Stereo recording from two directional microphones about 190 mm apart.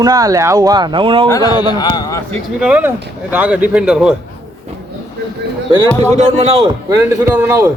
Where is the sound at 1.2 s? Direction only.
20° left (ahead or behind).